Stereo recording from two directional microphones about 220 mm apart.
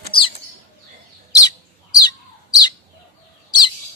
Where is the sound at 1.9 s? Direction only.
20° left (ahead or behind).